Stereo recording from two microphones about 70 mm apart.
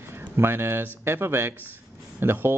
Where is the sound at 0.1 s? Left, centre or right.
Right.